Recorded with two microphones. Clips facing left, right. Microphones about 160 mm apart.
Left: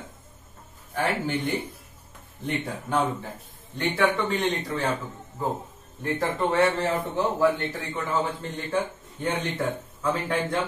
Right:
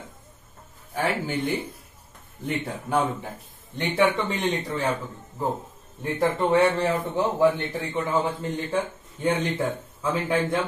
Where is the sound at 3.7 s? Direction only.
20° right (ahead or behind).